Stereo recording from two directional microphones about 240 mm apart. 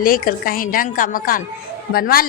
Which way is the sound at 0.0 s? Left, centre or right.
Left.